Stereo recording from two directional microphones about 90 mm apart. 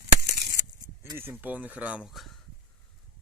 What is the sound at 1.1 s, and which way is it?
Speech, 25° right (ahead or behind).